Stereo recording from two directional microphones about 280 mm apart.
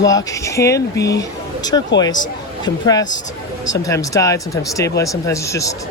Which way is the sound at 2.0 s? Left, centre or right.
Centre.